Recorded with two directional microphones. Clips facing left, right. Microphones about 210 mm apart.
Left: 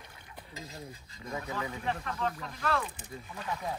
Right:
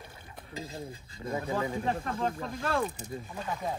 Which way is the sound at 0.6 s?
30° right (ahead or behind).